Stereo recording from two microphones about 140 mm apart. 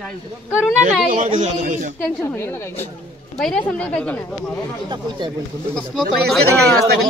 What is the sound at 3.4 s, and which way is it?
Speech, 5° left (ahead or behind).